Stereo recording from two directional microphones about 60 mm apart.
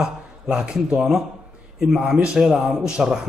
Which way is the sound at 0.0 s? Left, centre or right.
Centre.